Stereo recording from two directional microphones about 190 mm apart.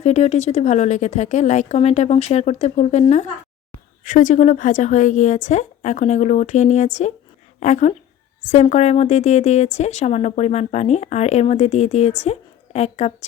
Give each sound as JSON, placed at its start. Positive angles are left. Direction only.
{"t": 0.0, "sound": "a woman's voice", "side_deg": 35}